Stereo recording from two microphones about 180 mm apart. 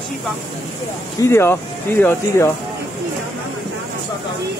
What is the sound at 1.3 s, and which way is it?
Speech, 15° left (ahead or behind).